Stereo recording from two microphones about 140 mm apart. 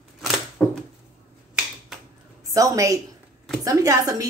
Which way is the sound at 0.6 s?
5° left (ahead or behind).